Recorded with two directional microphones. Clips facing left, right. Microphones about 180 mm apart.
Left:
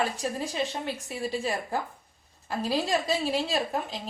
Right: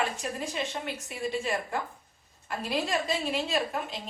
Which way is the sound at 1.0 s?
35° left (ahead or behind).